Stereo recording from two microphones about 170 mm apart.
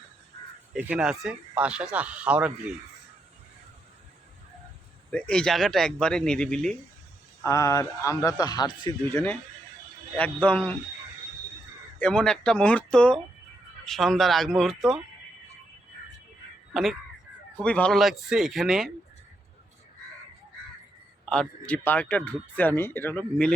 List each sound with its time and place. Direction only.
0.7 s speech: 5° right (ahead or behind)
5.1 s speech: 5° left (ahead or behind)
7.4 s speech: 20° left (ahead or behind)
9.1 s speech: 10° left (ahead or behind)
11.9 s speech: 5° left (ahead or behind)
17.6 s speech: 5° left (ahead or behind)
21.2 s speech: 5° left (ahead or behind)